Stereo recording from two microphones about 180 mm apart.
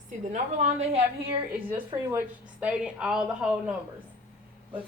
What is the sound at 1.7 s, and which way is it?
A woman's voice, 10° right (ahead or behind).